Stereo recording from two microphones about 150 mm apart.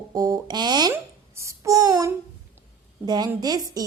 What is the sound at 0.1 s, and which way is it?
Speech, 25° right (ahead or behind).